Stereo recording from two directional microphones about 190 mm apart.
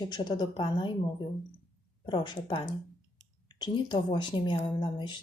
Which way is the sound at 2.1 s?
25° left (ahead or behind).